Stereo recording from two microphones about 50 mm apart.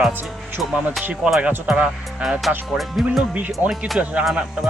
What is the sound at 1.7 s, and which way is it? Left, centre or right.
Speech, right.